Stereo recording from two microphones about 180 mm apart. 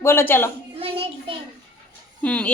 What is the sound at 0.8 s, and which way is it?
Speech, 30° right (ahead or behind).